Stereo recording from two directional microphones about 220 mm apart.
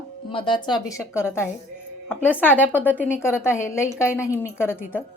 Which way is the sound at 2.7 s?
10° left (ahead or behind).